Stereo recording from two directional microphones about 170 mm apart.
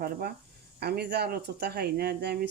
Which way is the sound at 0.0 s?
65° right (ahead or behind).